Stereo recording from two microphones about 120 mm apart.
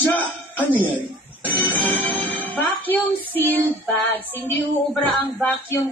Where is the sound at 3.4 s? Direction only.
15° left (ahead or behind).